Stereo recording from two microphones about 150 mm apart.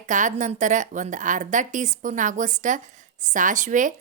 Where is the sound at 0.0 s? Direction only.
55° right (ahead or behind).